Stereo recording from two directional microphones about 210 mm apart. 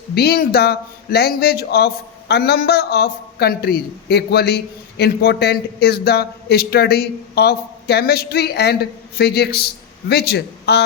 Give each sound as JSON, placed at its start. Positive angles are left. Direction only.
{"t": 0.1, "sound": "speech", "side_deg": 50}